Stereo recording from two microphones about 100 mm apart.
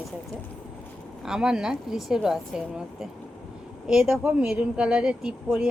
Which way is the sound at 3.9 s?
5° right (ahead or behind).